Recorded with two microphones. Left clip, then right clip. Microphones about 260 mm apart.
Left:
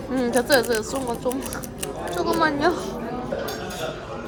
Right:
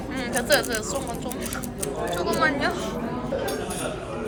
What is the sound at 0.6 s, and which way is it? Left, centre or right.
Speech, left.